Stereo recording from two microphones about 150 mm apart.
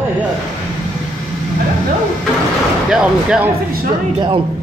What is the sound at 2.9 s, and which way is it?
Speech, 5° right (ahead or behind).